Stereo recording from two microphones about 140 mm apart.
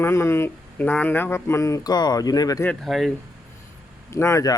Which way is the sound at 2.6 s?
Centre (ahead or behind).